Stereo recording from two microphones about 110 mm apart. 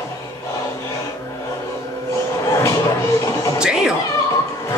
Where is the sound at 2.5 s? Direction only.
30° left (ahead or behind).